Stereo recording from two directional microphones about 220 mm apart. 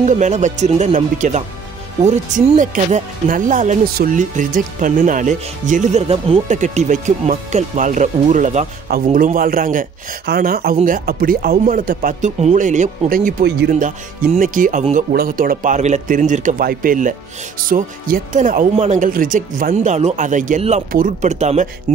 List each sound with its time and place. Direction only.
0.0 s speech: 35° right (ahead or behind)